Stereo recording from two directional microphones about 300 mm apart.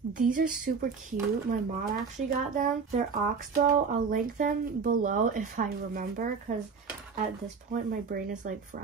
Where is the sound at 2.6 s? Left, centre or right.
Right.